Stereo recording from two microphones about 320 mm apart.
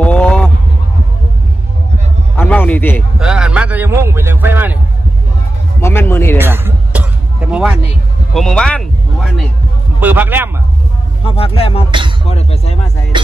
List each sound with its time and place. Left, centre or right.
0.0 s a sound: centre
2.3 s a sound: centre
5.8 s speech: centre
6.3 s music: centre
7.5 s speech: centre
11.2 s speech: centre
13.1 s music: centre